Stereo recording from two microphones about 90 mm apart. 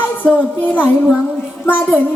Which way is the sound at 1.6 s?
20° left (ahead or behind).